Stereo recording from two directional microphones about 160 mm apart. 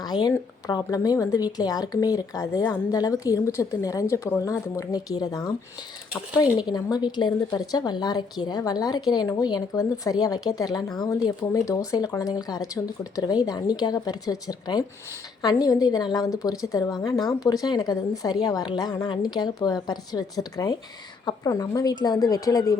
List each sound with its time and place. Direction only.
0.0 s a woman's voice: 25° left (ahead or behind)
6.4 s a woman's voice: 25° left (ahead or behind)